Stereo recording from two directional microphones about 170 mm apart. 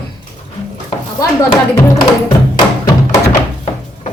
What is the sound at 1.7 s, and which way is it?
Music, 20° left (ahead or behind).